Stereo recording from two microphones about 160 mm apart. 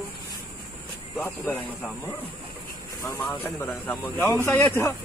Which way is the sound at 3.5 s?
15° left (ahead or behind).